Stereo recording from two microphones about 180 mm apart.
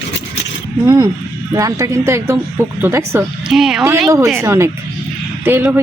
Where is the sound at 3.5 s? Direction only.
Centre (ahead or behind).